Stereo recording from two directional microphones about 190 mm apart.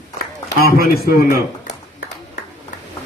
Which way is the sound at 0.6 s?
55° left (ahead or behind).